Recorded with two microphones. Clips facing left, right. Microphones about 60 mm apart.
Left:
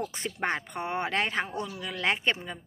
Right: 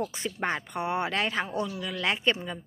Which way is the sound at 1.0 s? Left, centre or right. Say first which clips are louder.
Even; left.